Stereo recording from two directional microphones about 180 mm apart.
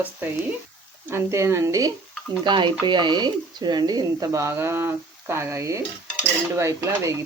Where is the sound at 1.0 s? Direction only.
15° right (ahead or behind).